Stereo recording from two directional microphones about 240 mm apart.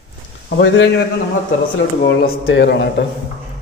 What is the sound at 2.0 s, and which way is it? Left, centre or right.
A man's voice, left.